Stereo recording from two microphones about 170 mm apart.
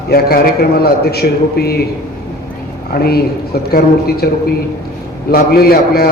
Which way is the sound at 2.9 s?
65° left (ahead or behind).